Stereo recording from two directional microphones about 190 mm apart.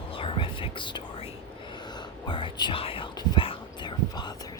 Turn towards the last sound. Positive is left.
turn(degrees=20)  # may be behind; listen again after turning